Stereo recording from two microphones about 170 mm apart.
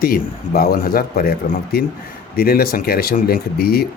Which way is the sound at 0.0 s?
60° left (ahead or behind).